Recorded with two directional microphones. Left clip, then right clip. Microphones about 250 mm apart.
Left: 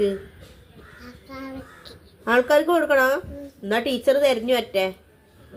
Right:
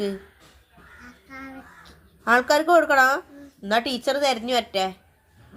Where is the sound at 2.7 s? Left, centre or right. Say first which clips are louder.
Right 2 dB; right.